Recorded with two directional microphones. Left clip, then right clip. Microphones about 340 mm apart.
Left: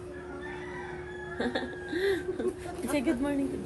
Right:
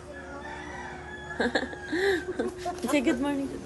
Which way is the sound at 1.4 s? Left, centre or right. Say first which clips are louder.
Right 5 dB; right.